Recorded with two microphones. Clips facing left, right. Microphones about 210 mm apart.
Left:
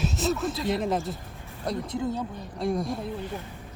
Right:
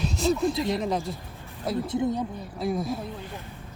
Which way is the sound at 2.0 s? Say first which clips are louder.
Right 3 dB; 15° right (ahead or behind).